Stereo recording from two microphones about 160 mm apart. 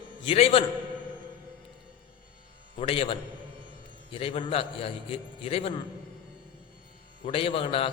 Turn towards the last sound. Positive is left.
turn(degrees=35)  # may be behind; listen again after turning